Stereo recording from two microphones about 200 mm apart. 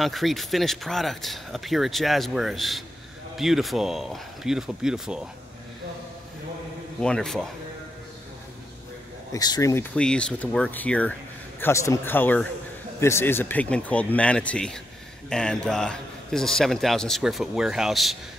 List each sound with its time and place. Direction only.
0.0 s a man's voice: centre (ahead or behind)
7.0 s a man's voice: 5° left (ahead or behind)
9.3 s speech: 15° left (ahead or behind)
9.9 s a man's voice: 5° left (ahead or behind)